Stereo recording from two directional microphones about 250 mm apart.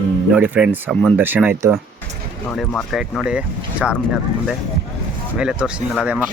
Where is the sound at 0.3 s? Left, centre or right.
Centre.